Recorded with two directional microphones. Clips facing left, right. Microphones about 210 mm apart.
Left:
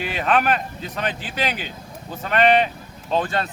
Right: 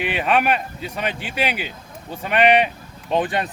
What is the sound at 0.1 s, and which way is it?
Speech, 10° right (ahead or behind).